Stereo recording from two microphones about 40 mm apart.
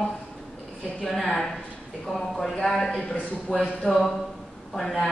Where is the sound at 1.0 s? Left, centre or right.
Centre.